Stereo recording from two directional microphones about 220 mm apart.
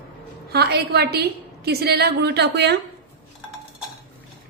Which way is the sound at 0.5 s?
45° right (ahead or behind).